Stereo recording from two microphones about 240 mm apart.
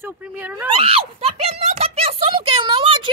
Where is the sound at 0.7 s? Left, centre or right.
Right.